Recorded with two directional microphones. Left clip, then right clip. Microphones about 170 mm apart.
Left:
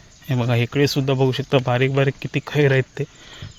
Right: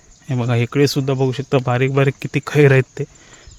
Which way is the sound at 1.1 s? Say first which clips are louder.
Right 1 dB; 25° right (ahead or behind).